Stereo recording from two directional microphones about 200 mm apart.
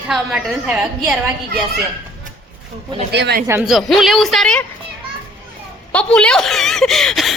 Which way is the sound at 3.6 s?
Centre (ahead or behind).